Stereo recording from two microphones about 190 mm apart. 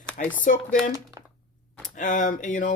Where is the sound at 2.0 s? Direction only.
45° left (ahead or behind).